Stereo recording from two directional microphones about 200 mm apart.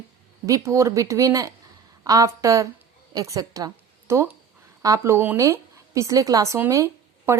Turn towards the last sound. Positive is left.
turn(degrees=-15)  # may be behind; listen again after turning